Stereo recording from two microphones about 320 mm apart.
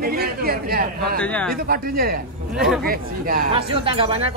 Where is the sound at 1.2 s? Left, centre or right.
Centre.